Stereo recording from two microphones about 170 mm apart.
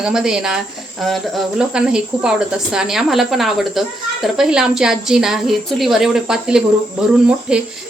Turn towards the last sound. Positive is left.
turn(degrees=-5)  # may be behind; listen again after turning